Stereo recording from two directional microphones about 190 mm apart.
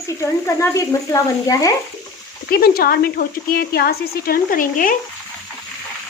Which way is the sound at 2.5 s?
55° left (ahead or behind).